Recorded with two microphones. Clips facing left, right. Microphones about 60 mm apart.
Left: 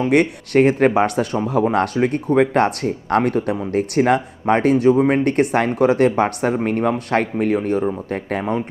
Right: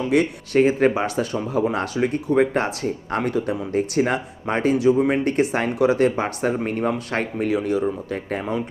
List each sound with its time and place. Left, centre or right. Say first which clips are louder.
0.0 s speech: left 4 dB; left